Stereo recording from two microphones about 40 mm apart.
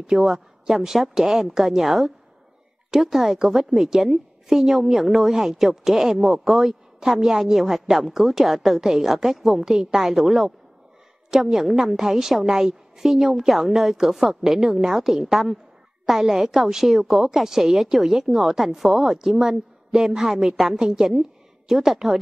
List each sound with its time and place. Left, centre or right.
0.0 s a woman's voice: centre